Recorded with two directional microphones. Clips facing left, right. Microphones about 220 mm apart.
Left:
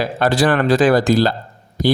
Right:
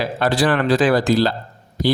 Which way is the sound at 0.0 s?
45° left (ahead or behind).